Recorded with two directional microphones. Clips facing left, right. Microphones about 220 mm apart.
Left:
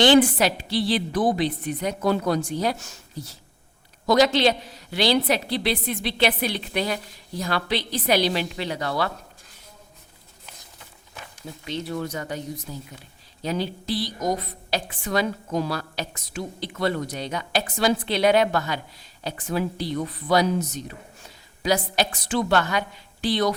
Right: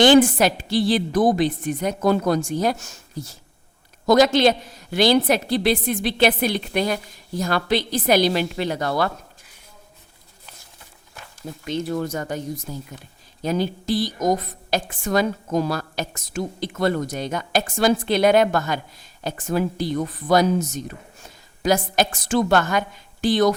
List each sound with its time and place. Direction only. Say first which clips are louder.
0.0 s a woman's voice: right 3 dB; 45° right (ahead or behind)
11.6 s a woman's voice: right 4 dB; 45° right (ahead or behind)